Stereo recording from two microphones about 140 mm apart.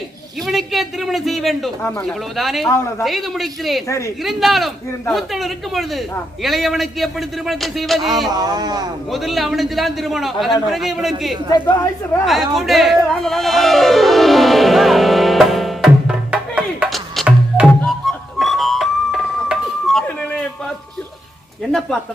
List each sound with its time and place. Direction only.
0.4 s a man's voice: centre (ahead or behind)
2.6 s a woman's voice: 20° left (ahead or behind)
3.0 s a man's voice: centre (ahead or behind)
3.8 s a woman's voice: 20° left (ahead or behind)
4.2 s a man's voice: centre (ahead or behind)
8.3 s speech: 25° right (ahead or behind)
9.0 s a man's voice: centre (ahead or behind)
12.2 s music: centre (ahead or behind)
17.7 s music: centre (ahead or behind)
21.7 s a man's voice: 5° left (ahead or behind)